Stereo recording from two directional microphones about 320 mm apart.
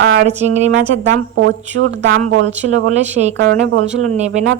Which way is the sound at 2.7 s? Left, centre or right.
Right.